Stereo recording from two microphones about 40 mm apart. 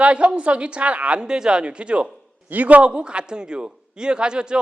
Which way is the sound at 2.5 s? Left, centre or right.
Right.